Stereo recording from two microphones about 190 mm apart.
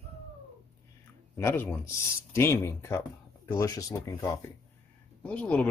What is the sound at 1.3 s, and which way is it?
Speech, 10° left (ahead or behind).